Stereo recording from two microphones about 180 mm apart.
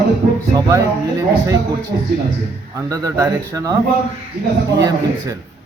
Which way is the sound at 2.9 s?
15° right (ahead or behind).